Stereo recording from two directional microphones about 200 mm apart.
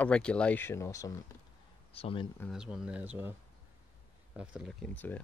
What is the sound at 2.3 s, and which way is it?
Speech, centre (ahead or behind).